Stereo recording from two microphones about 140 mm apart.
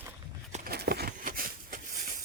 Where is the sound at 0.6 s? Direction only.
90° right.